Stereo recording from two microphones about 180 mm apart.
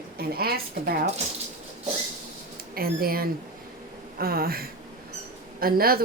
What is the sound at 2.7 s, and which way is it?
Speech, 55° right (ahead or behind).